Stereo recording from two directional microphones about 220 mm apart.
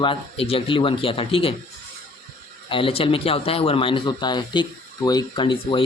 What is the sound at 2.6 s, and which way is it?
Speech, 25° left (ahead or behind).